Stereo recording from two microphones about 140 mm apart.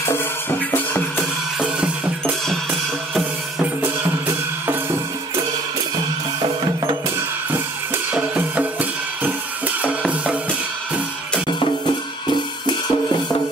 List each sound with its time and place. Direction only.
0.0 s music: 15° left (ahead or behind)
1.6 s music: 5° right (ahead or behind)
3.8 s music: 15° right (ahead or behind)
7.5 s music: 15° right (ahead or behind)
11.4 s music: 35° left (ahead or behind)